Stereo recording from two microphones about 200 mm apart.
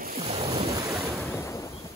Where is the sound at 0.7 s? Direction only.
20° right (ahead or behind).